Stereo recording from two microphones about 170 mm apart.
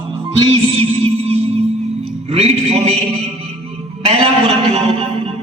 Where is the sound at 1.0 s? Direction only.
35° right (ahead or behind).